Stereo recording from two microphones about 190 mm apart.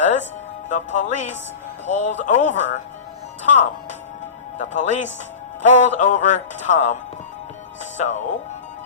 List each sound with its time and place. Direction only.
0.0 s music: 40° left (ahead or behind)
0.7 s speech: 40° left (ahead or behind)